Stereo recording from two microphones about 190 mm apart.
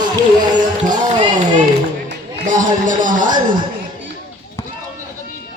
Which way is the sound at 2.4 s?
45° right (ahead or behind).